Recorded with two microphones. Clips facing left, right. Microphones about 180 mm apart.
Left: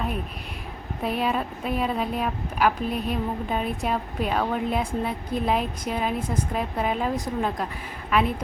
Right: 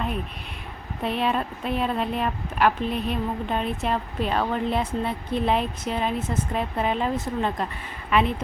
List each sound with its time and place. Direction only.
1.0 s a woman's voice: 5° left (ahead or behind)